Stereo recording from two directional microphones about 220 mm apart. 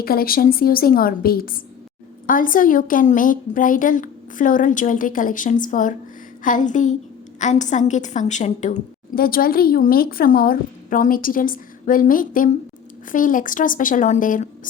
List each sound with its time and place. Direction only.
0.0 s a woman's voice: 45° left (ahead or behind)